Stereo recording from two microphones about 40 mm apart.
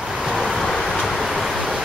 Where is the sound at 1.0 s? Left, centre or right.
Centre.